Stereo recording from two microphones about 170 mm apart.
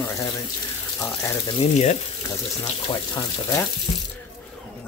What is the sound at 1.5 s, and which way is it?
Speech, 40° left (ahead or behind).